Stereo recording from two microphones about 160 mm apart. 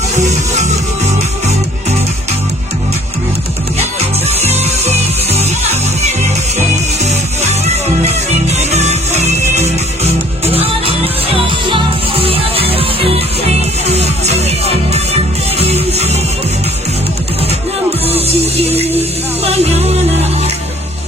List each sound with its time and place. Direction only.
0.2 s music: 45° right (ahead or behind)
4.3 s music: 40° right (ahead or behind)
18.0 s music: 40° right (ahead or behind)